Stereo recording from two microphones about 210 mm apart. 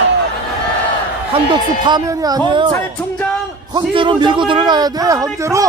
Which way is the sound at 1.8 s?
20° right (ahead or behind).